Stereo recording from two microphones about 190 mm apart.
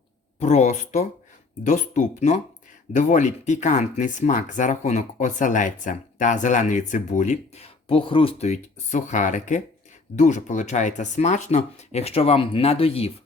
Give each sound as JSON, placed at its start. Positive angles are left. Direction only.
{"t": 0.3, "sound": "speech", "side_deg": 35}